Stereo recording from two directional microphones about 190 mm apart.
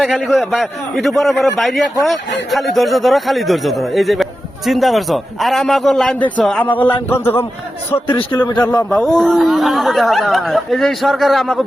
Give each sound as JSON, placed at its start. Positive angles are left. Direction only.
{"t": 0.0, "sound": "a man's voice", "side_deg": 0}
{"t": 8.0, "sound": "a man's voice", "side_deg": 25}
{"t": 8.9, "sound": "a man's voice", "side_deg": 0}